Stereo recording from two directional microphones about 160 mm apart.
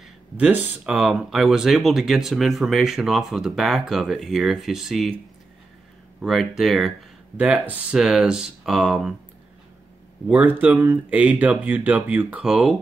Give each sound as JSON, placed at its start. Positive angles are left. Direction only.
{"t": 0.0, "sound": "speech", "side_deg": -10}
{"t": 6.2, "sound": "speech", "side_deg": 0}
{"t": 10.2, "sound": "speech", "side_deg": -10}